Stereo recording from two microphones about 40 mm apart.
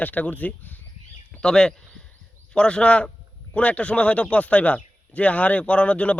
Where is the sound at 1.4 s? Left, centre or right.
Centre.